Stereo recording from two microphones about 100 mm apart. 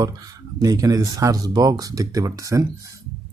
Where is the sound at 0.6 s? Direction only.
35° right (ahead or behind).